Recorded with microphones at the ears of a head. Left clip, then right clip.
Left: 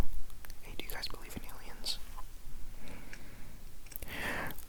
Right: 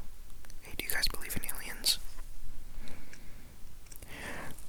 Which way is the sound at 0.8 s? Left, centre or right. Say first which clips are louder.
Right 9 dB; right.